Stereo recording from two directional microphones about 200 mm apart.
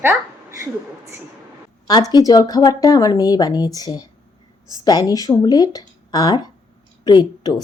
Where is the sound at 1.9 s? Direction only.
20° left (ahead or behind).